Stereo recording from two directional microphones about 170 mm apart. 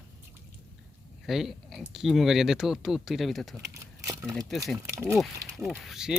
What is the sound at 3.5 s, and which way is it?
Speech, 15° right (ahead or behind).